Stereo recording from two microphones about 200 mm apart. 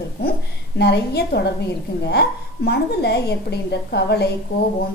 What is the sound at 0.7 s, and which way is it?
A woman's voice, 55° left (ahead or behind).